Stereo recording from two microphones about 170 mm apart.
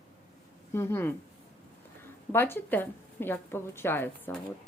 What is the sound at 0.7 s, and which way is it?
Speech, 15° left (ahead or behind).